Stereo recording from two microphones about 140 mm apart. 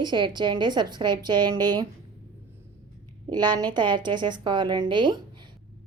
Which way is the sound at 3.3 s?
30° right (ahead or behind).